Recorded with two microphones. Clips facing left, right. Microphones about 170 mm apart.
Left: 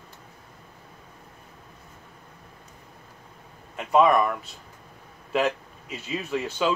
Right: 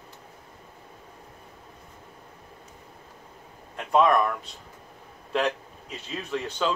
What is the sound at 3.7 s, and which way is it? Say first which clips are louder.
Speech: left 2 dB; 5° left (ahead or behind).